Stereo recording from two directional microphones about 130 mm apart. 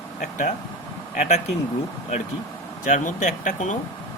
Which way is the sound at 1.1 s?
65° left (ahead or behind).